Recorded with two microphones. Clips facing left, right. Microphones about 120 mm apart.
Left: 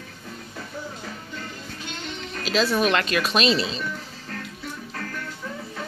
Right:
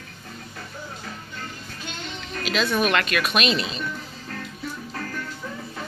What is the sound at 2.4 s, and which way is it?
Speech, 35° left (ahead or behind).